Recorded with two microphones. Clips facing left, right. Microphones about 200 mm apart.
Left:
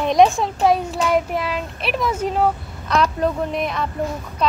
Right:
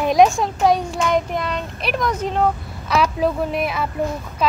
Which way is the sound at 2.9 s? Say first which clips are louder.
Even; 5° right (ahead or behind).